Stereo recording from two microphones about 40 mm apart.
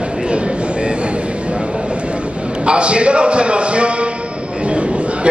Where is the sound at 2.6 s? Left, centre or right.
Right.